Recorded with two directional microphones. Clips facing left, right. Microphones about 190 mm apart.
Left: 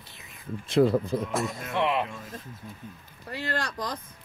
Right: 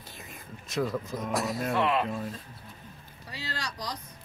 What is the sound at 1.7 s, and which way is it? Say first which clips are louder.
Speech: even; 20° left (ahead or behind).